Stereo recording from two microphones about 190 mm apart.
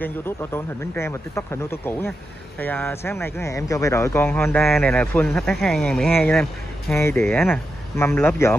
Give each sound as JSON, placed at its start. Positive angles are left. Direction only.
{"t": 0.0, "sound": "speech", "side_deg": 10}